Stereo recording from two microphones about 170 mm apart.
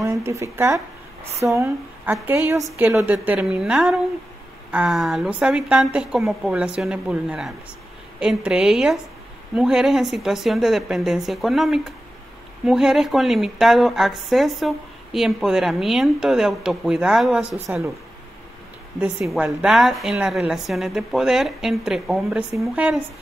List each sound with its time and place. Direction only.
0.0 s a woman's voice: 15° right (ahead or behind)
18.9 s a woman's voice: 10° right (ahead or behind)